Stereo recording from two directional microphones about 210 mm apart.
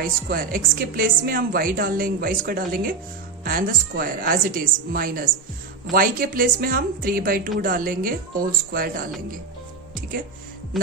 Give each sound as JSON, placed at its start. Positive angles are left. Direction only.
{"t": 0.0, "sound": "a woman's voice", "side_deg": -45}